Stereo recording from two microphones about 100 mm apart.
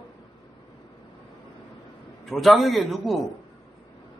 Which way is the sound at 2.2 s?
Centre (ahead or behind).